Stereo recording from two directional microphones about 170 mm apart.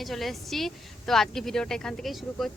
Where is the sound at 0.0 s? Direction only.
Centre (ahead or behind).